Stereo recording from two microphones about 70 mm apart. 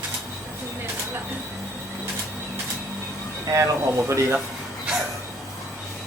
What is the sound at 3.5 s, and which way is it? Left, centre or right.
Speech, right.